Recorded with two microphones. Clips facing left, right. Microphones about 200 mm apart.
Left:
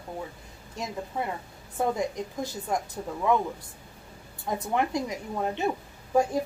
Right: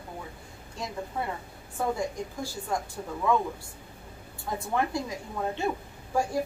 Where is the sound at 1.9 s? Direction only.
20° left (ahead or behind).